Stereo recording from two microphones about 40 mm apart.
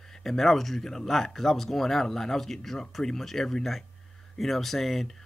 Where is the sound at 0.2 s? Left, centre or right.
Centre.